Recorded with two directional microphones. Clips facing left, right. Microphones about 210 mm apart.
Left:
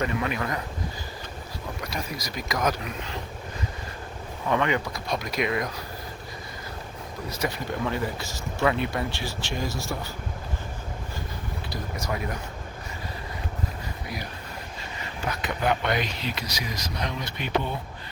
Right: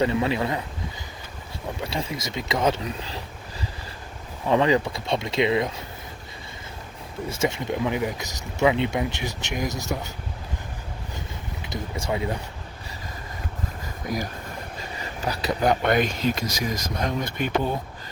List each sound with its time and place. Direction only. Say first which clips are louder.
0.0 s speech: right 5 dB; 25° right (ahead or behind)
1.8 s speech: right 5 dB; 25° right (ahead or behind)
4.4 s speech: right 5 dB; 30° right (ahead or behind)
7.3 s speech: right 5 dB; 20° right (ahead or behind)
11.7 s speech: right 4 dB; 20° right (ahead or behind)
15.3 s speech: right 4 dB; 35° right (ahead or behind)